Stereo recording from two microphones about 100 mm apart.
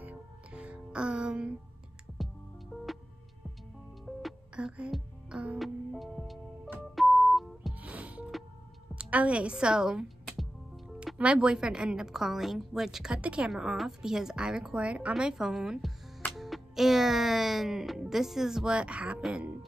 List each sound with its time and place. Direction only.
0.0 s music: 15° right (ahead or behind)
4.0 s music: centre (ahead or behind)
7.8 s music: 15° right (ahead or behind)
11.1 s a woman's voice: 10° right (ahead or behind)